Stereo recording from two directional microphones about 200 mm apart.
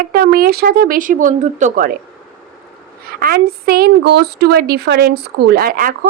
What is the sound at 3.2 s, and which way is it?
A woman's voice, 50° right (ahead or behind).